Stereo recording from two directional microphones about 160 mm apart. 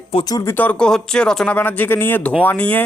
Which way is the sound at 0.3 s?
15° left (ahead or behind).